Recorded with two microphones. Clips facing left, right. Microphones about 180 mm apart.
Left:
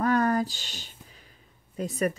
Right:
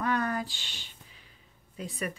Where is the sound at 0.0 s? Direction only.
40° left (ahead or behind).